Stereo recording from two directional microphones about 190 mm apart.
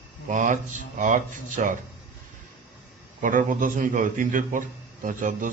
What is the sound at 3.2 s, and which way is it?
A man's voice, 45° right (ahead or behind).